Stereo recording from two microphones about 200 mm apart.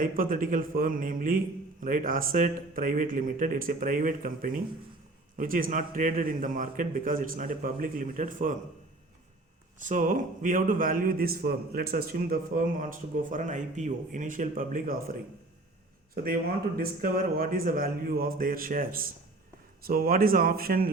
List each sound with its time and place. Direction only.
0.0 s a man's voice: 45° right (ahead or behind)
9.7 s a man's voice: 40° right (ahead or behind)
16.1 s a man's voice: 45° right (ahead or behind)